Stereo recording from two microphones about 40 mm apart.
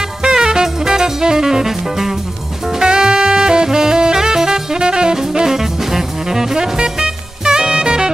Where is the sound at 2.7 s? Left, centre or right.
Centre.